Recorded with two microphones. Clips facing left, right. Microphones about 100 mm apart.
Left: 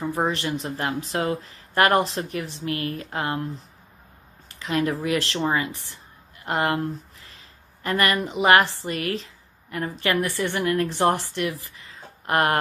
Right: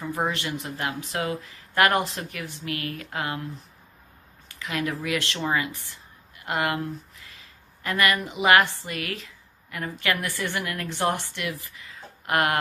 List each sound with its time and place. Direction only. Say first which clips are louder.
0.2 s speech: left 2 dB; 30° left (ahead or behind)
4.5 s a woman's voice: left 5 dB; 30° left (ahead or behind)